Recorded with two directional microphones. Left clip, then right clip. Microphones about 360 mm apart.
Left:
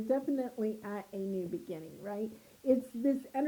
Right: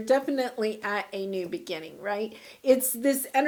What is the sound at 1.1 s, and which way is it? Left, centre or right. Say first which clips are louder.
Speech: right 7 dB; right.